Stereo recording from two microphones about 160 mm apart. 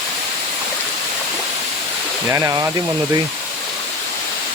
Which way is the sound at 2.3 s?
20° right (ahead or behind).